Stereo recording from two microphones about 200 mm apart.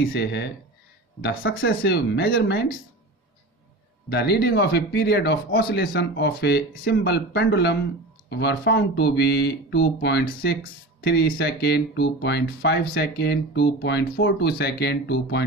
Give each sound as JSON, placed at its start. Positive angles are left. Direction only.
{"t": 0.0, "sound": "speech", "side_deg": 60}
{"t": 1.7, "sound": "speech", "side_deg": 50}
{"t": 4.1, "sound": "speech", "side_deg": 55}